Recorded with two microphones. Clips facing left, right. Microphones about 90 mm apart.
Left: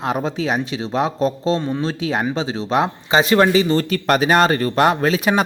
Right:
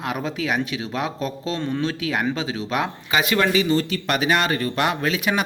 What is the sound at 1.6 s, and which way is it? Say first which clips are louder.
Speech: left 2 dB; 15° left (ahead or behind).